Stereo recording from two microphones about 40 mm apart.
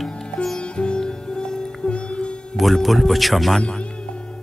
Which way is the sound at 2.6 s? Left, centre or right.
Centre.